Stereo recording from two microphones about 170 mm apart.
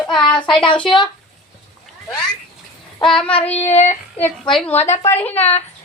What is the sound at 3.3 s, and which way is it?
Child singing, 35° left (ahead or behind).